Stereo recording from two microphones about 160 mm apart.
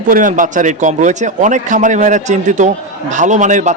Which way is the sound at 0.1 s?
55° right (ahead or behind).